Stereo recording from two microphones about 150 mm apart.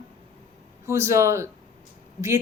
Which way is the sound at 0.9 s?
20° right (ahead or behind).